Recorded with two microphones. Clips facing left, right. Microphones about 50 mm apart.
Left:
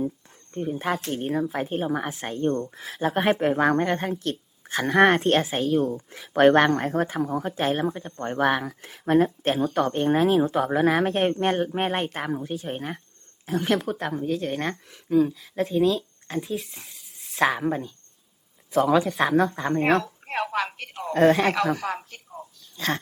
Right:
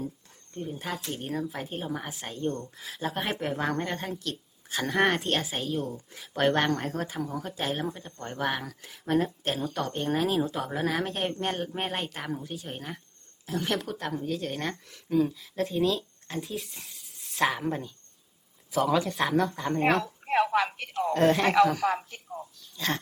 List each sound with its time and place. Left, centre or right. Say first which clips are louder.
0.5 s speech: left 7 dB; left
0.9 s speech: left 8 dB; left
1.1 s speech: left 7 dB; left
8.8 s speech: left 6 dB; left
13.6 s speech: left 6 dB; centre
14.3 s speech: left 6 dB; left
14.8 s speech: left 5 dB; centre
17.4 s speech: left 4 dB; left
18.9 s speech: left 5 dB; left
20.0 s a sound: right 3 dB; centre
21.1 s speech: left 5 dB; left
21.9 s speech: right 2 dB; centre